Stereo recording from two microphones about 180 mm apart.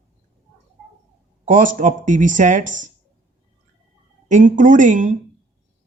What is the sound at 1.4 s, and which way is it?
Speech, 45° right (ahead or behind).